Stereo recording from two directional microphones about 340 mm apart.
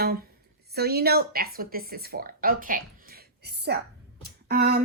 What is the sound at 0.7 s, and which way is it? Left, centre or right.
Speech, right.